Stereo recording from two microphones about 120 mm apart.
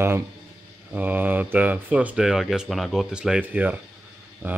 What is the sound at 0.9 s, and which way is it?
Speech, 15° right (ahead or behind).